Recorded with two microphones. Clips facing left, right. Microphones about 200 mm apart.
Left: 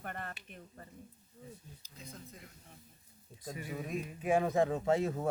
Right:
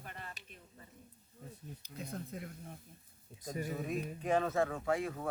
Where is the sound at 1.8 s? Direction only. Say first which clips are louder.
Right 7 dB; 60° right (ahead or behind).